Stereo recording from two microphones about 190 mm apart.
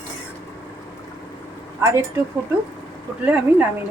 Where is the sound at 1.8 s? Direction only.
15° right (ahead or behind).